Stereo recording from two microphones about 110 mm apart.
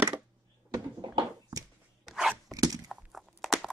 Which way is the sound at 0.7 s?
40° right (ahead or behind).